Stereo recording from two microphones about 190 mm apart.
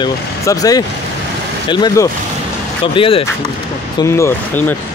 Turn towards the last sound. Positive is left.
turn(degrees=15)  # may be behind; listen again after turning